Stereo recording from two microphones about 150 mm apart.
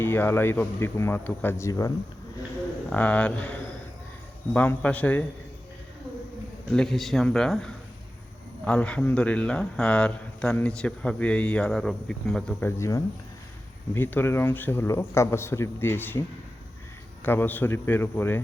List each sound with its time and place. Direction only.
0.0 s speech: 15° left (ahead or behind)
2.9 s speech: 10° left (ahead or behind)
6.7 s a man's voice: centre (ahead or behind)
17.2 s speech: 15° left (ahead or behind)